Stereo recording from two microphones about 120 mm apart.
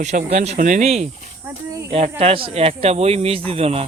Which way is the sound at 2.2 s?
50° right (ahead or behind).